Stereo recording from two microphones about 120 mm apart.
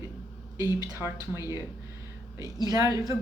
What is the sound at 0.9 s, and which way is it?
Speech, 20° right (ahead or behind).